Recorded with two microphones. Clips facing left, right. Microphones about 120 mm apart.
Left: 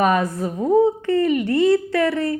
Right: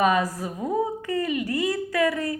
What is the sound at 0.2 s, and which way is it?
Speech, 25° left (ahead or behind).